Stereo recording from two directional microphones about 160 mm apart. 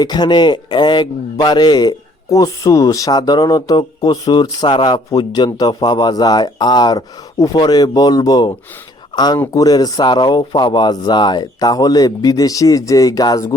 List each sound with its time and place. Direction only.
0.0 s a man's voice: 25° left (ahead or behind)